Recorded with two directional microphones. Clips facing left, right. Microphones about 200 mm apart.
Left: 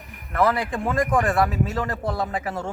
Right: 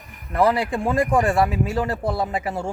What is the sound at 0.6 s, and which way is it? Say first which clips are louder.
A man's voice: right 3 dB; 10° right (ahead or behind).